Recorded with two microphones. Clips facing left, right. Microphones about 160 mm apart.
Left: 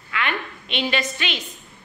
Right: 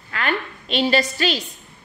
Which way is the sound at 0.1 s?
40° right (ahead or behind).